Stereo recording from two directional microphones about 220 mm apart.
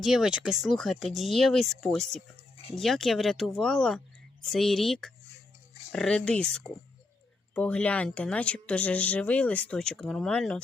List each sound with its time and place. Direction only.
0.0 s speech: centre (ahead or behind)